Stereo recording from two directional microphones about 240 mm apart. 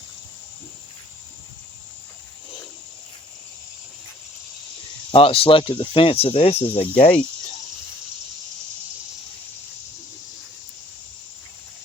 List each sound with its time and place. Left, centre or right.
5.1 s speech: left